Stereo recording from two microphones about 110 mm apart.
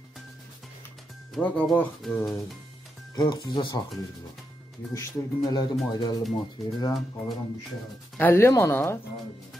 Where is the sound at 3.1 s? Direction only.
40° left (ahead or behind).